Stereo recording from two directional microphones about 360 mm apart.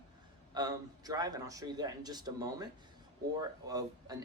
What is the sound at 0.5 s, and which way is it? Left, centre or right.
Speech, centre.